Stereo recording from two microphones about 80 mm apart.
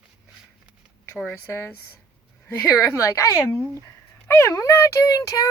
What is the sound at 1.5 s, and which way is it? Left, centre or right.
A woman's voice, left.